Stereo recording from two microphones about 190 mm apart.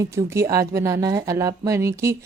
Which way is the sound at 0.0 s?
15° right (ahead or behind).